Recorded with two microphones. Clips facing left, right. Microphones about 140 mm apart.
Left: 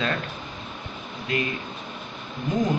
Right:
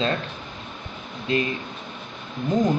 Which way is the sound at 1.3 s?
30° right (ahead or behind).